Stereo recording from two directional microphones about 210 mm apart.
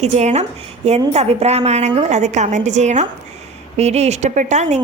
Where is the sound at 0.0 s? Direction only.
30° right (ahead or behind).